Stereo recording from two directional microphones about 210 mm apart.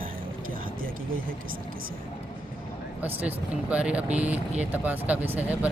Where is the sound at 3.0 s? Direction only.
10° right (ahead or behind).